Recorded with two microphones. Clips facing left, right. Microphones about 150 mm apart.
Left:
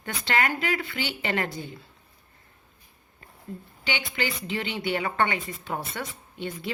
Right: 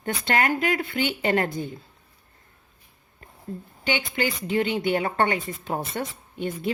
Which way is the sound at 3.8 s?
45° right (ahead or behind).